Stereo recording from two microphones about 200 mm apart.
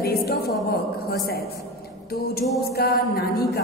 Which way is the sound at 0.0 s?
50° left (ahead or behind).